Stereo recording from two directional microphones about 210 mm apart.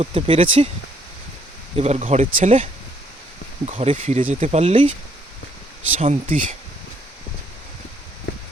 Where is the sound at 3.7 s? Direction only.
30° right (ahead or behind).